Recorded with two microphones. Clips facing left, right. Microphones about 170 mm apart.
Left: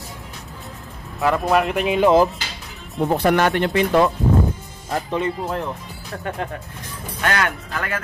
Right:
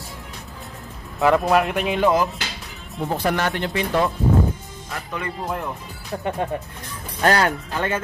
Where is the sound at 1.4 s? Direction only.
Centre (ahead or behind).